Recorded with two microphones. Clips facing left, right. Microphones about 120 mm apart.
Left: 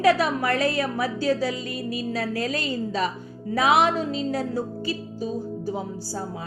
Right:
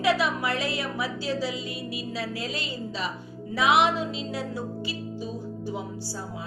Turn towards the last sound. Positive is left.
turn(degrees=40)  # may be behind; listen again after turning